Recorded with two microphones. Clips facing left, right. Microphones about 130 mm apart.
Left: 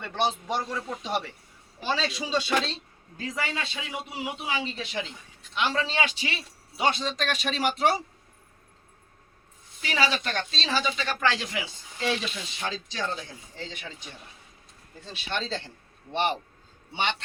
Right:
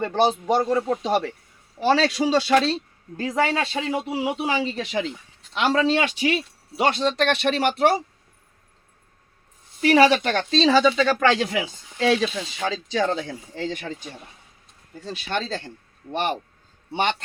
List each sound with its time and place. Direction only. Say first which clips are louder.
0.0 s speech: right 7 dB; 50° right (ahead or behind)
1.8 s speech: right 10 dB; 85° right
3.4 s speech: right 12 dB; 45° right (ahead or behind)
4.4 s speech: right 7 dB; 75° right (ahead or behind)
6.0 s speech: right 7 dB; 50° right (ahead or behind)
6.8 s speech: right 6 dB; 70° right (ahead or behind); by 8.0 s 55° right (ahead or behind)
9.8 s speech: right 11 dB; 60° right (ahead or behind)
11.9 s speech: right 9 dB; 90° right
13.7 s speech: right 11 dB; 45° right (ahead or behind)